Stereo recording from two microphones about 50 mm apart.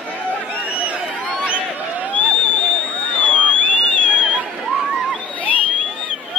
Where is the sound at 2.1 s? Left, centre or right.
Left.